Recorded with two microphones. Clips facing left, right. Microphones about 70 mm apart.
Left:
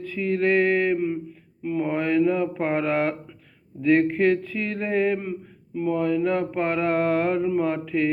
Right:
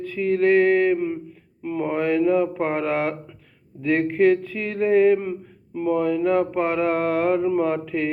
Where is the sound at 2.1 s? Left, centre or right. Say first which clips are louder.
Right 2 dB; right.